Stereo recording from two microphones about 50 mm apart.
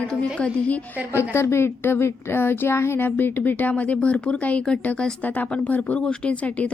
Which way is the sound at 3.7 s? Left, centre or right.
Left.